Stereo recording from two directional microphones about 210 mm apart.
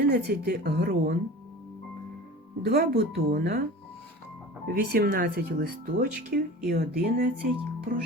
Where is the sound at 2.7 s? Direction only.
50° right (ahead or behind).